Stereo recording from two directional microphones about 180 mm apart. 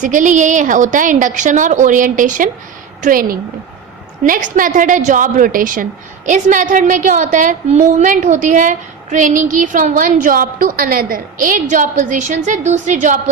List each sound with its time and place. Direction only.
0.0 s a woman's voice: 45° right (ahead or behind)